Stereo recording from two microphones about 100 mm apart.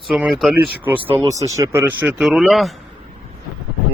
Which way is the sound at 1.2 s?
30° right (ahead or behind).